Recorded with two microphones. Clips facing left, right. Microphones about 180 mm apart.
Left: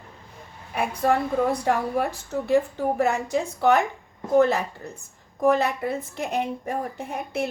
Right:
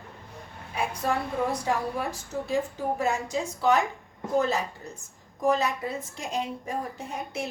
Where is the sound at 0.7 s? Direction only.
60° left (ahead or behind).